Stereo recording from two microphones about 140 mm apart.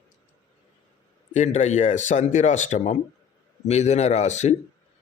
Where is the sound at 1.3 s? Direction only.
55° left (ahead or behind).